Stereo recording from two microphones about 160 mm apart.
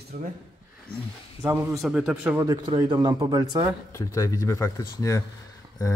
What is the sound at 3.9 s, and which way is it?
Speech, 15° left (ahead or behind).